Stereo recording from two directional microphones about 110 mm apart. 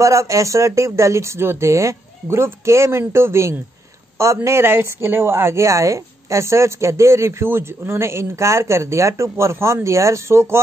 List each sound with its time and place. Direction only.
0.0 s speech: 30° right (ahead or behind)